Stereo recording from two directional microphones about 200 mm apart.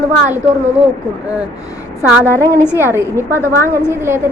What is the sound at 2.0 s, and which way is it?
Speech, 10° right (ahead or behind).